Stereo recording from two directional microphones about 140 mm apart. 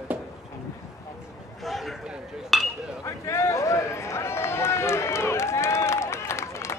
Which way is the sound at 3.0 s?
20° left (ahead or behind).